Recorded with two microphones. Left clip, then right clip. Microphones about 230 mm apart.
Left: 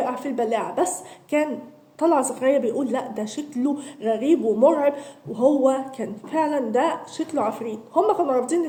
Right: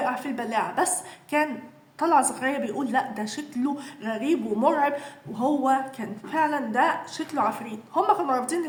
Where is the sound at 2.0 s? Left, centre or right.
Centre.